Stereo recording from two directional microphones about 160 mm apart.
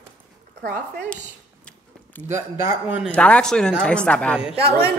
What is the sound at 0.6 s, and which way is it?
Speech, 90° right.